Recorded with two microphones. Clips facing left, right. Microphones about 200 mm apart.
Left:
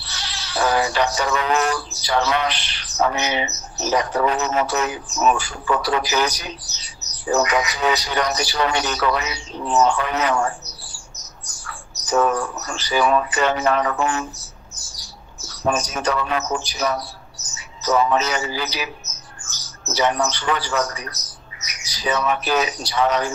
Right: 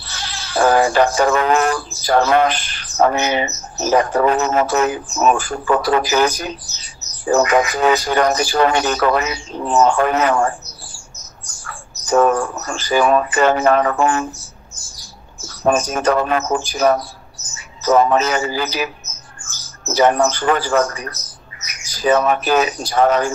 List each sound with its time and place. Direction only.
0.0 s speech: 50° right (ahead or behind)
15.4 s speech: 50° right (ahead or behind)